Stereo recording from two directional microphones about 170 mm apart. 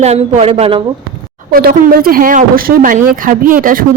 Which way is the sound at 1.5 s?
60° right (ahead or behind).